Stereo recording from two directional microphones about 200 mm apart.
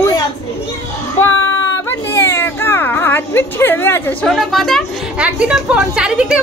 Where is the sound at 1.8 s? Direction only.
15° left (ahead or behind); by 6.4 s 5° right (ahead or behind).